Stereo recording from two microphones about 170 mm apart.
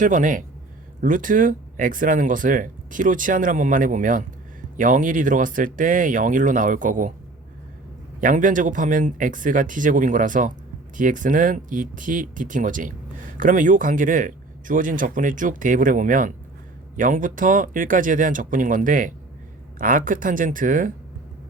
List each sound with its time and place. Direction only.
0.0 s speech: 50° right (ahead or behind)
8.2 s speech: 50° right (ahead or behind)